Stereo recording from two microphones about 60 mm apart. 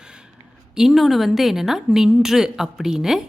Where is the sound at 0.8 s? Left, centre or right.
Centre.